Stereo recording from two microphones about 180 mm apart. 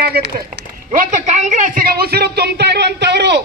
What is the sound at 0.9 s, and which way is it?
A woman's voice, 45° right (ahead or behind).